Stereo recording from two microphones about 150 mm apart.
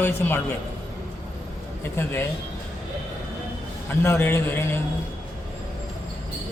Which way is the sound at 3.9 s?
15° left (ahead or behind).